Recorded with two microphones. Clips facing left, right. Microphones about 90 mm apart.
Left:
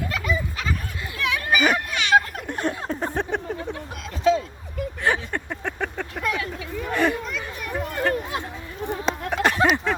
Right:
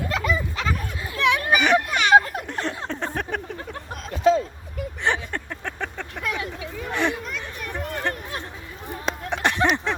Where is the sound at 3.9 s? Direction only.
40° right (ahead or behind).